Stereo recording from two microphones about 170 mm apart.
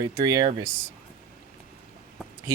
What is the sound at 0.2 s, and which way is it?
Speech, 25° right (ahead or behind).